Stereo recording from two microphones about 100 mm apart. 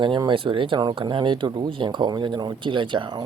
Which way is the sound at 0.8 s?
45° right (ahead or behind).